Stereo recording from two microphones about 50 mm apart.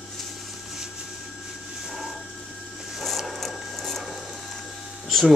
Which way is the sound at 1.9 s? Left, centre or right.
Centre.